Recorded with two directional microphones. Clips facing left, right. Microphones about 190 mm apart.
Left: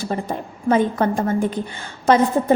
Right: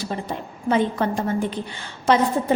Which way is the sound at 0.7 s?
45° left (ahead or behind).